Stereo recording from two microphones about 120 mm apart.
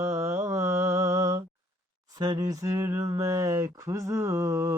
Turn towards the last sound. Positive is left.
turn(degrees=-25)  # may be behind; listen again after turning